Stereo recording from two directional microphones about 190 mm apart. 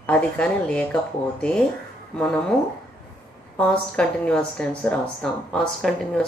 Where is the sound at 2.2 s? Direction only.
5° left (ahead or behind).